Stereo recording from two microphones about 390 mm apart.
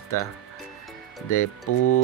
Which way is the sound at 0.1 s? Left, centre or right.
Left.